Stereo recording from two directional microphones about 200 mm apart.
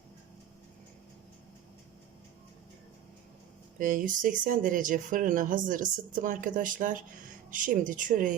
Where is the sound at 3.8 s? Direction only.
40° right (ahead or behind).